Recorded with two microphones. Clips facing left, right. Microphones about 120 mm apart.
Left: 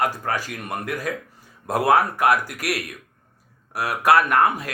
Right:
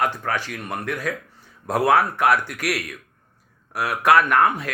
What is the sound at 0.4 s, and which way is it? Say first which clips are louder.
Speech: right 1 dB; 10° left (ahead or behind).